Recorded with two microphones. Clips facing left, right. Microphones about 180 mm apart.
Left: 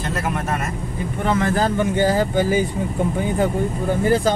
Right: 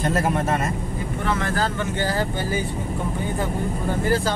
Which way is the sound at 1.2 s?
20° left (ahead or behind).